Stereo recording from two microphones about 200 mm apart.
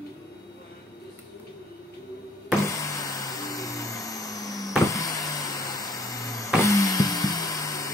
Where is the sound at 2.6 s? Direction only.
15° left (ahead or behind).